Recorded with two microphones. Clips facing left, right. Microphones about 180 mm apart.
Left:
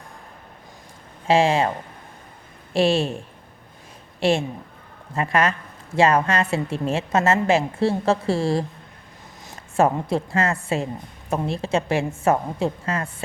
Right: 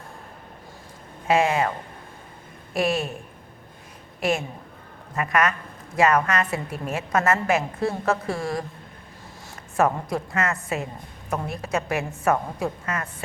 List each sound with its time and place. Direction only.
1.3 s a woman's voice: 30° left (ahead or behind)
2.7 s a woman's voice: 30° left (ahead or behind)
4.2 s a woman's voice: 30° left (ahead or behind)
9.7 s a woman's voice: 25° left (ahead or behind)